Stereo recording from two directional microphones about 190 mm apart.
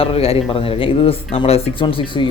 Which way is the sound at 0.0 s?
30° left (ahead or behind).